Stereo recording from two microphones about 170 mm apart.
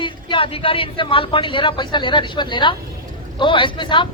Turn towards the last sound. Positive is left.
turn(degrees=30)  # may be behind; listen again after turning